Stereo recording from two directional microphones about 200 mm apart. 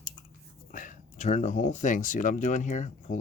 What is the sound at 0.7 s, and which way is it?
Speech, 40° left (ahead or behind).